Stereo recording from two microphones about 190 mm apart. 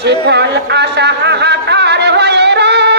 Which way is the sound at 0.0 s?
60° right (ahead or behind).